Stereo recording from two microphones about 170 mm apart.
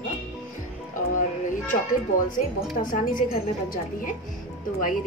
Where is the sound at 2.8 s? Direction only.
50° left (ahead or behind).